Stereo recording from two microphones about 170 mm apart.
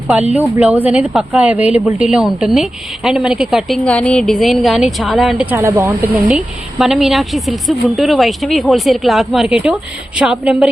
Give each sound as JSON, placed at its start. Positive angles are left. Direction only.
{"t": 0.3, "sound": "speech", "side_deg": -10}
{"t": 6.2, "sound": "speech", "side_deg": -5}